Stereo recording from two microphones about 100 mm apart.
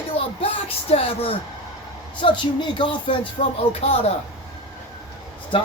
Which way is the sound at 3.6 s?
75° left (ahead or behind).